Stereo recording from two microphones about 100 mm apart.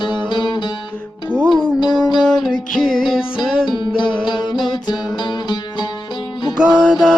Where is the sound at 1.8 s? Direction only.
45° left (ahead or behind).